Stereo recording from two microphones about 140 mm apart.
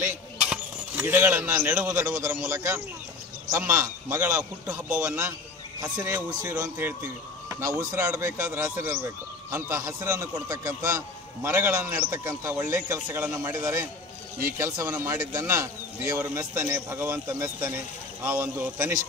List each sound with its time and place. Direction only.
0.0 s speech: 10° right (ahead or behind)